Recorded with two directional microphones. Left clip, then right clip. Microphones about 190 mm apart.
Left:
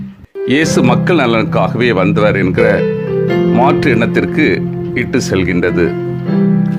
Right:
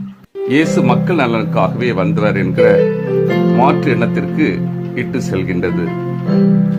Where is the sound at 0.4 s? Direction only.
25° left (ahead or behind).